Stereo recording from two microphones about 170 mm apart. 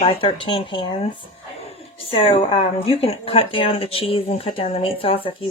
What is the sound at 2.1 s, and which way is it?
Speech, 35° left (ahead or behind).